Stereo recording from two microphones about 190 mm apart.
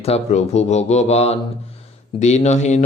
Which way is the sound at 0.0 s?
35° left (ahead or behind).